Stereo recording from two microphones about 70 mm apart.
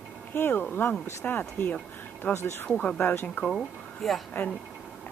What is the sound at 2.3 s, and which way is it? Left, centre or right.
Speech, left.